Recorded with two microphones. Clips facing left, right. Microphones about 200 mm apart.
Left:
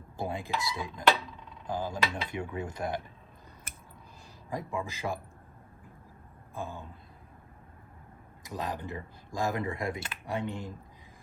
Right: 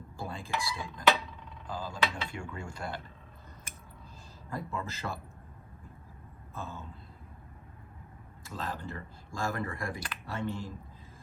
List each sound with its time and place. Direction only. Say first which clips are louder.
0.2 s dishes: left 5 dB; 20° left (ahead or behind)
0.6 s cutlery: even; 20° left (ahead or behind)
4.4 s speech: left 2 dB; 15° left (ahead or behind)
6.5 s speech: left 3 dB; 15° left (ahead or behind)
8.4 s speech: left 3 dB; 15° left (ahead or behind)